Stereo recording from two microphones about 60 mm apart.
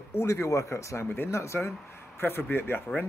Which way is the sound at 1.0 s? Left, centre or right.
Left.